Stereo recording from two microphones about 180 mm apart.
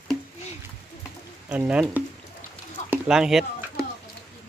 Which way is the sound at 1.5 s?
5° right (ahead or behind).